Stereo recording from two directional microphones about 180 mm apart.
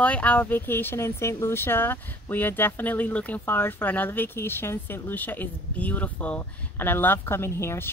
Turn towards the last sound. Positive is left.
turn(degrees=15)  # may be behind; listen again after turning